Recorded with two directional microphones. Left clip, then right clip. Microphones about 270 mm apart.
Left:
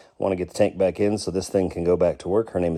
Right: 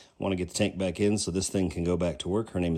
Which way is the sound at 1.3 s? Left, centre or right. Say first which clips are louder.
Left 6 dB; left.